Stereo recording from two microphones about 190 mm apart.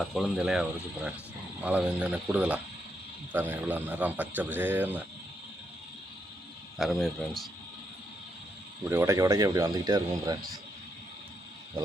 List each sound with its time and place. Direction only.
0.0 s speech: centre (ahead or behind)
6.7 s speech: centre (ahead or behind)
8.9 s speech: 15° right (ahead or behind)